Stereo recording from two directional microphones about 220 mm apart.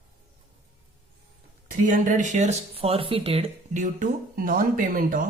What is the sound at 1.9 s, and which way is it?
Speech, 35° right (ahead or behind).